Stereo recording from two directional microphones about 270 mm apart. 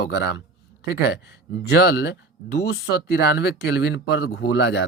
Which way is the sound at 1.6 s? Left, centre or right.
Left.